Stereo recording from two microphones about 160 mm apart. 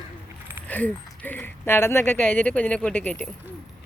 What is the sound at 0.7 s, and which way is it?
Speech, 10° left (ahead or behind).